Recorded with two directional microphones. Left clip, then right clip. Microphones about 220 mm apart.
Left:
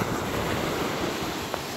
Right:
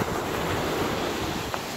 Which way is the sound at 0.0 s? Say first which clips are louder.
Right 1 dB; 40° left (ahead or behind).